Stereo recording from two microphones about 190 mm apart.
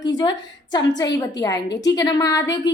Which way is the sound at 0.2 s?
20° left (ahead or behind).